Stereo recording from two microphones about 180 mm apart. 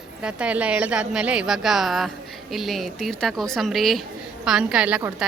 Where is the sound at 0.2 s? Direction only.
5° right (ahead or behind).